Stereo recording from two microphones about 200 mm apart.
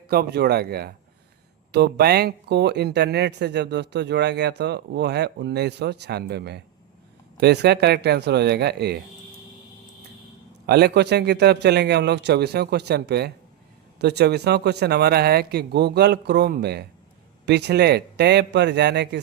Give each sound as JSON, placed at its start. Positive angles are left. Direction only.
{"t": 0.1, "sound": "speech", "side_deg": -50}
{"t": 10.7, "sound": "speech", "side_deg": -55}